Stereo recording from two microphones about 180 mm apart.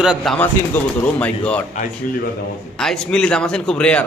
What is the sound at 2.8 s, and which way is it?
A man's voice, 5° left (ahead or behind).